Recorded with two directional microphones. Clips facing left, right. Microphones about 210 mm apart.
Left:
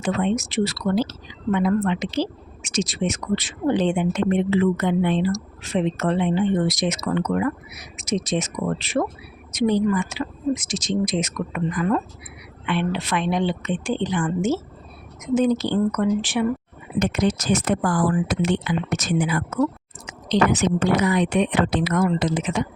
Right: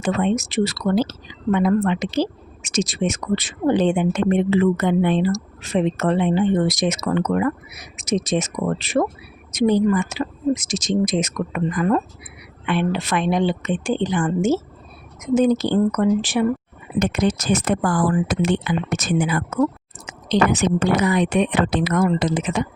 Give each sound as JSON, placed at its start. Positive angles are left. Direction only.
{"t": 0.0, "sound": "speech", "side_deg": -50}
{"t": 17.0, "sound": "speech", "side_deg": -55}